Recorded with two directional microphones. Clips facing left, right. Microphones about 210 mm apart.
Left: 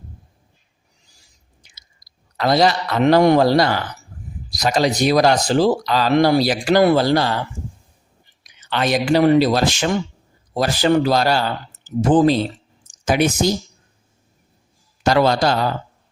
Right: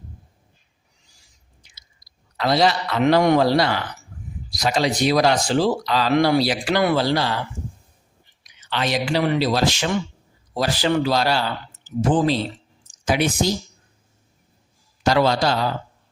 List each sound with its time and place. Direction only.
2.4 s speech: 45° left (ahead or behind)
8.7 s speech: 50° left (ahead or behind)
15.0 s speech: 50° left (ahead or behind)